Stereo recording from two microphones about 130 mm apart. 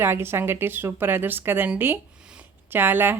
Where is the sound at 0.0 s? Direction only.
20° right (ahead or behind).